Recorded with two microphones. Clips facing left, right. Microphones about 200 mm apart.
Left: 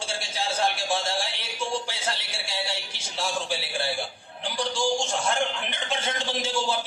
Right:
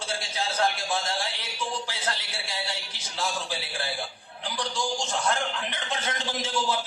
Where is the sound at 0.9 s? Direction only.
30° left (ahead or behind).